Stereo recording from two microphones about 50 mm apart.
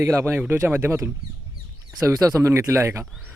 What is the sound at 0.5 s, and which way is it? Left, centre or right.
Speech, right.